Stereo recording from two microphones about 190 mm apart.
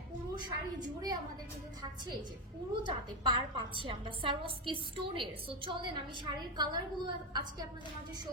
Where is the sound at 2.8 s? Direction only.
25° right (ahead or behind).